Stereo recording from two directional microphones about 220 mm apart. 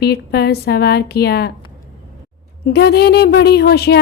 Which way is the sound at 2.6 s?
45° left (ahead or behind).